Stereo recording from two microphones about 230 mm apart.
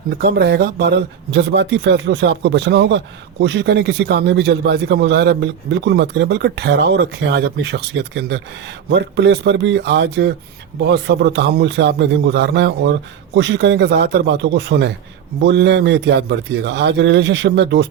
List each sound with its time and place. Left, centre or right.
0.2 s a man's voice: right